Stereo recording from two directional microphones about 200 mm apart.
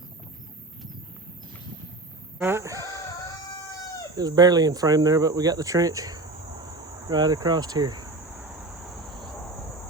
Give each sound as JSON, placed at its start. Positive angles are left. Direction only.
{"t": 2.4, "sound": "chicken", "side_deg": -10}
{"t": 4.2, "sound": "speech", "side_deg": -20}